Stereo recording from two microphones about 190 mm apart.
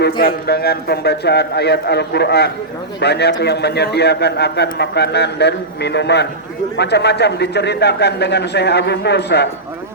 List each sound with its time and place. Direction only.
0.2 s a man's voice: 55° left (ahead or behind)